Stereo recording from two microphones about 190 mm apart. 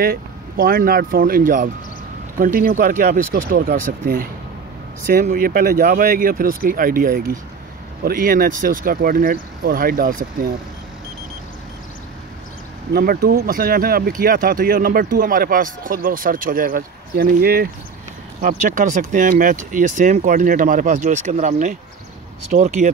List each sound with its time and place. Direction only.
0.0 s speech: 50° right (ahead or behind)
12.9 s speech: 50° right (ahead or behind)